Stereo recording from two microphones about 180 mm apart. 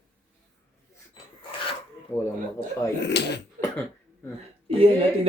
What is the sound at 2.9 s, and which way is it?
Speech, 70° left (ahead or behind).